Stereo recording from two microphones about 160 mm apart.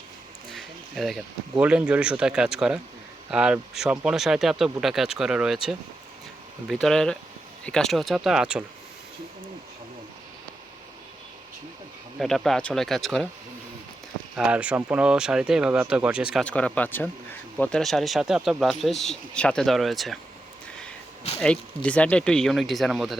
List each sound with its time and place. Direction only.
0.5 s a sound: centre (ahead or behind)
1.6 s speech: 5° right (ahead or behind)
6.7 s speech: centre (ahead or behind)
12.2 s speech: centre (ahead or behind)
14.3 s speech: 5° right (ahead or behind)
16.4 s speech: 5° left (ahead or behind)
21.8 s speech: 10° left (ahead or behind)